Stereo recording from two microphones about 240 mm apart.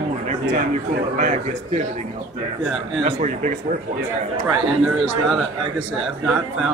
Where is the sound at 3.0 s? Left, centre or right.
Right.